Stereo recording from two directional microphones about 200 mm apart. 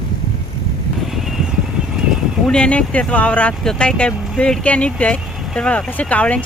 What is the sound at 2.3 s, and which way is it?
Speech, 5° left (ahead or behind).